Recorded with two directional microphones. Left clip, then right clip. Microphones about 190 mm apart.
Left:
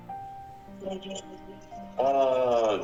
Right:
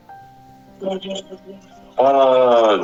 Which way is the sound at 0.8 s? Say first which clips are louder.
Right 12 dB; 25° right (ahead or behind).